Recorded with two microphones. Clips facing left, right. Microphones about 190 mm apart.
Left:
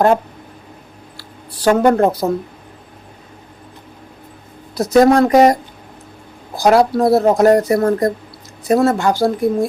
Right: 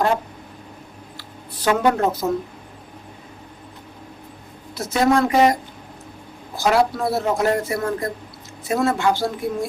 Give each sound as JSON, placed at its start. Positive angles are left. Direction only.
{"t": 1.6, "sound": "a woman's voice", "side_deg": 45}
{"t": 4.7, "sound": "speech", "side_deg": 35}
{"t": 6.6, "sound": "speech", "side_deg": 40}